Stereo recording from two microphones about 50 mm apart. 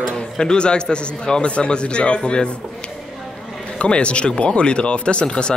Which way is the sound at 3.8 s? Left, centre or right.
Left.